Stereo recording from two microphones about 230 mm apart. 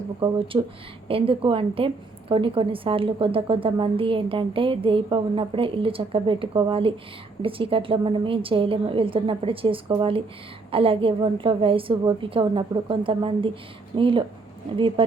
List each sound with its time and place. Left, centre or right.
0.2 s a woman's voice: right